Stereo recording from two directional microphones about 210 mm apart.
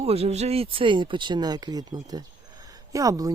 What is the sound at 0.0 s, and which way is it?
Speech, 30° right (ahead or behind).